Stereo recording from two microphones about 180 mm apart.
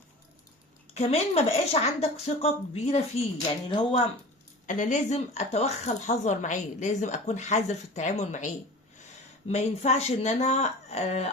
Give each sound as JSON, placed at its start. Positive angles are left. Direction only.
{"t": 0.9, "sound": "speech", "side_deg": 35}
{"t": 4.6, "sound": "speech", "side_deg": 45}
{"t": 9.5, "sound": "speech", "side_deg": 35}